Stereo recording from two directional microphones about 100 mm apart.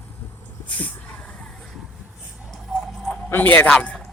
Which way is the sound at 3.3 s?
20° left (ahead or behind).